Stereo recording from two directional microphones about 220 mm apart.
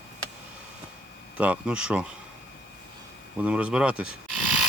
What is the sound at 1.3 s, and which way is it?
Speech, 5° right (ahead or behind).